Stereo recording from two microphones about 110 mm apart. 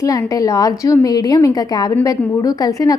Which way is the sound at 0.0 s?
30° left (ahead or behind).